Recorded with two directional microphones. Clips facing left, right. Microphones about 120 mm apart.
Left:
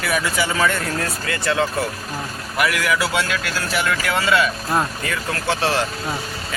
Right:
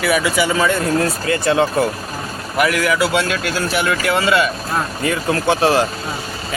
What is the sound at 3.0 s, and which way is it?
Speech, 15° right (ahead or behind).